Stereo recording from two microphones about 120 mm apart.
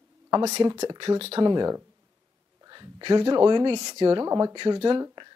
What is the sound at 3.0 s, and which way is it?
Speech, 40° right (ahead or behind).